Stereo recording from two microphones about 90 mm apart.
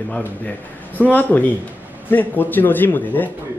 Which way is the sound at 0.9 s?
20° left (ahead or behind).